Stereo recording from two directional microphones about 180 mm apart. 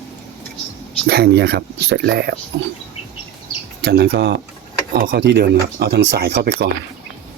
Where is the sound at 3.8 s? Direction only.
65° right (ahead or behind).